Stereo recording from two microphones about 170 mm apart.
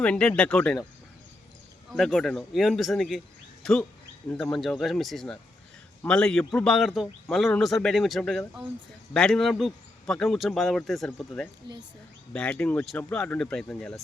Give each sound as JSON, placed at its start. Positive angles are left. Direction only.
{"t": 0.0, "sound": "speech", "side_deg": 5}
{"t": 2.0, "sound": "a man's voice", "side_deg": 0}
{"t": 11.6, "sound": "speech", "side_deg": -25}
{"t": 12.3, "sound": "speech", "side_deg": 5}